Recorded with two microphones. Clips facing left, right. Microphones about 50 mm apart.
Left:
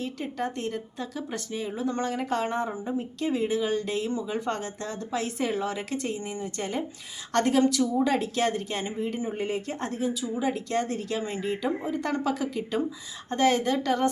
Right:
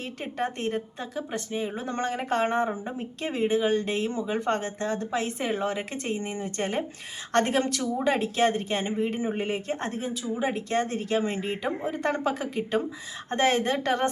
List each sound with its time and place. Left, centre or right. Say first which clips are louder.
0.0 s speech: even; right
1.1 s speech: right 4 dB; right